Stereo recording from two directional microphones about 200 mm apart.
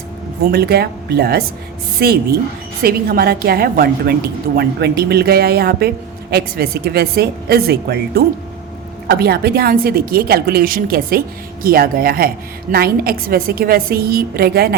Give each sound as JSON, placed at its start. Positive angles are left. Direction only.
{"t": 0.5, "sound": "a woman's voice", "side_deg": -50}